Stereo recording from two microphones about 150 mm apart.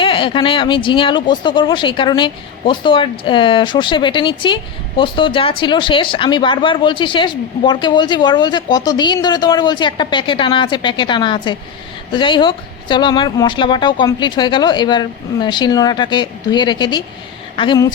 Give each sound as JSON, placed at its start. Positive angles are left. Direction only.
{"t": 0.0, "sound": "speech", "side_deg": 35}